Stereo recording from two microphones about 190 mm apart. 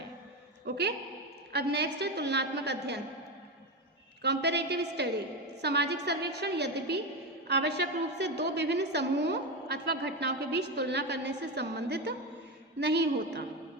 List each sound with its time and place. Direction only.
0.6 s a sound: 60° right (ahead or behind)
1.5 s a woman's voice: 60° right (ahead or behind)
4.2 s a woman's voice: 60° right (ahead or behind)